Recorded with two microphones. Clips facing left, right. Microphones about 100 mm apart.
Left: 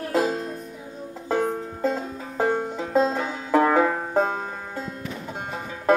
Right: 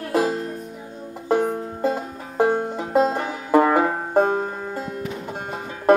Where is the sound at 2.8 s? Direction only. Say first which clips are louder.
Right 2 dB; 5° right (ahead or behind).